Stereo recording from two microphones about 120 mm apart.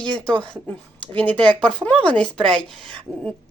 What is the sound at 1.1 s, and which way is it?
A woman's voice, 10° left (ahead or behind).